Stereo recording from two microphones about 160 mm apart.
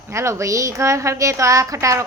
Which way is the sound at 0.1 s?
20° right (ahead or behind).